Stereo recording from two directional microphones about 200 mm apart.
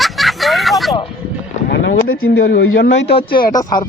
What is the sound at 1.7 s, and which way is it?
Speech, 80° left.